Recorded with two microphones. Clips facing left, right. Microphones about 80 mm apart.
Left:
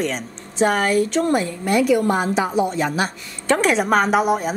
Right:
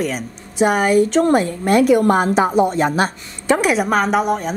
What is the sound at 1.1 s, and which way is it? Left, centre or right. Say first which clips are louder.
A woman's voice: right 4 dB; right.